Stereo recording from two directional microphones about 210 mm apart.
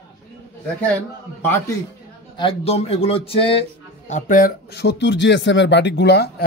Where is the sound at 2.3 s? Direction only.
25° left (ahead or behind).